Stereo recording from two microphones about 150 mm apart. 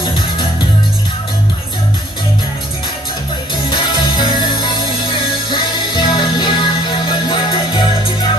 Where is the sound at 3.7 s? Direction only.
30° left (ahead or behind).